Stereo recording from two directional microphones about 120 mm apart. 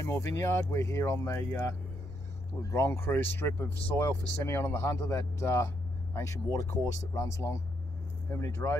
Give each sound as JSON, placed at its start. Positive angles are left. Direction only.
{"t": 0.0, "sound": "speech", "side_deg": 25}
{"t": 2.6, "sound": "speech", "side_deg": 25}